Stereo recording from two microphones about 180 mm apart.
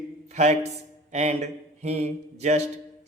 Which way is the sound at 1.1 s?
40° right (ahead or behind).